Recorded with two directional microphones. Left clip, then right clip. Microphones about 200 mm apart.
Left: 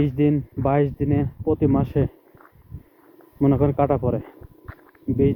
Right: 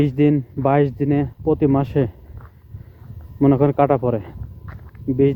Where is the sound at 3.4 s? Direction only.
30° right (ahead or behind).